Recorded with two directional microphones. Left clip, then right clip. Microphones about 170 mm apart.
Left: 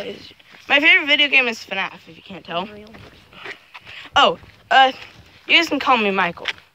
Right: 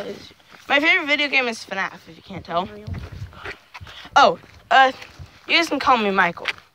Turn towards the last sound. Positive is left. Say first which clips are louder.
# even
turn(degrees=5)  # may be behind; listen again after turning